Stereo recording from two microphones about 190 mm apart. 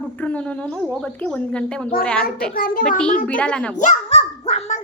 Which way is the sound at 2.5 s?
50° left (ahead or behind).